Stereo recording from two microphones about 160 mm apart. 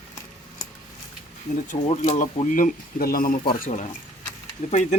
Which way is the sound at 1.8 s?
40° left (ahead or behind).